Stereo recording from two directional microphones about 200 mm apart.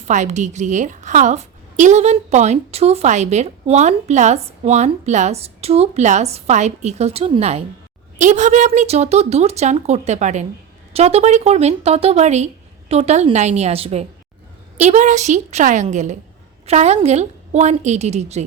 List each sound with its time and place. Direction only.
0.1 s a woman's voice: 35° right (ahead or behind)